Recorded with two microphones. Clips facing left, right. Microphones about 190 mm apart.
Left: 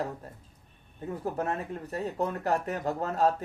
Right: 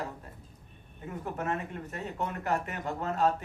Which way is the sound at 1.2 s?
35° left (ahead or behind).